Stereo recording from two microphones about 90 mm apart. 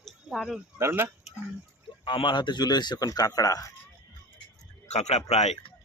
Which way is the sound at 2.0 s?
60° left (ahead or behind).